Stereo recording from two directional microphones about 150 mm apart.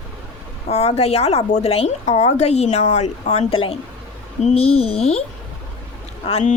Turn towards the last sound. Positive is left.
turn(degrees=45)  # may be behind; listen again after turning